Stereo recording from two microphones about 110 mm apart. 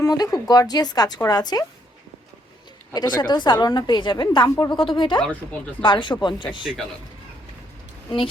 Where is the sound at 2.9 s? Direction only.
40° left (ahead or behind).